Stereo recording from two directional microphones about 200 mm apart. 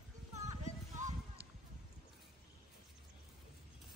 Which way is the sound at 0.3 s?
35° right (ahead or behind).